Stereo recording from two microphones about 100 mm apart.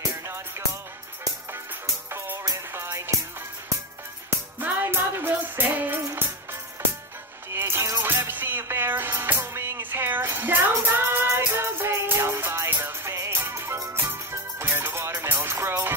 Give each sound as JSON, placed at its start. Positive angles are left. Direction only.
{"t": 0.1, "sound": "music", "side_deg": -30}
{"t": 2.0, "sound": "music", "side_deg": -25}
{"t": 4.3, "sound": "music", "side_deg": -20}
{"t": 7.5, "sound": "music", "side_deg": -25}